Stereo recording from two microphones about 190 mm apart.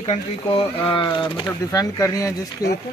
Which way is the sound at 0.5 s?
25° left (ahead or behind).